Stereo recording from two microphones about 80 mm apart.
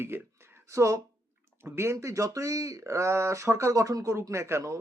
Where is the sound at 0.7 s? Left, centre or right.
Right.